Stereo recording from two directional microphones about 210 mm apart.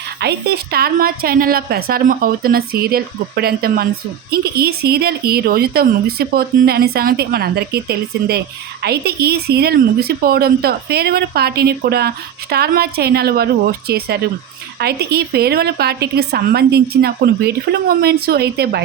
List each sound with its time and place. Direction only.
0.2 s a woman's voice: 50° right (ahead or behind)